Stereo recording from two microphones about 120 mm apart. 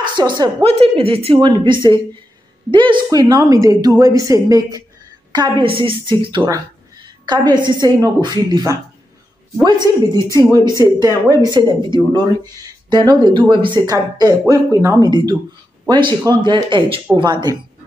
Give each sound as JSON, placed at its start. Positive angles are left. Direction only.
{"t": 0.0, "sound": "a woman's voice", "side_deg": -40}
{"t": 0.7, "sound": "speech", "side_deg": -55}
{"t": 2.7, "sound": "a woman's voice", "side_deg": -45}
{"t": 7.5, "sound": "a woman's voice", "side_deg": -40}
{"t": 15.0, "sound": "a woman's voice", "side_deg": -35}